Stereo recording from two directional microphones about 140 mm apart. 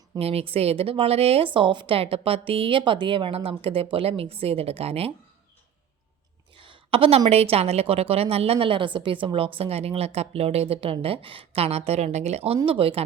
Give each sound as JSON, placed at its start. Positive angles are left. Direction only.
{"t": 0.2, "sound": "a woman's voice", "side_deg": -45}
{"t": 6.5, "sound": "a sound", "side_deg": -35}
{"t": 7.3, "sound": "a woman's voice", "side_deg": -45}